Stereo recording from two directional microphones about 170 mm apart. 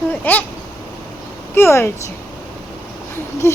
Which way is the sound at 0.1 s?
10° left (ahead or behind).